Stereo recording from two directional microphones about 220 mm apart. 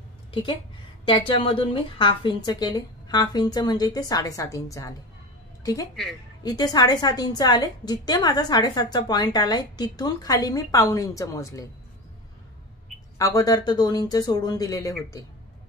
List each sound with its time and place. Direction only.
0.3 s a woman's voice: 20° left (ahead or behind)
13.2 s a woman's voice: 15° left (ahead or behind)